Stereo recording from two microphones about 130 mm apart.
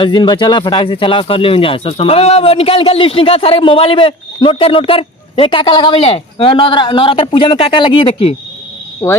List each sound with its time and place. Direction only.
0.0 s speech: 35° left (ahead or behind)
9.0 s speech: 20° left (ahead or behind)